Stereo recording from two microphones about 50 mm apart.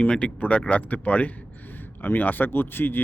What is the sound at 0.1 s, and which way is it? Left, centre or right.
Speech, left.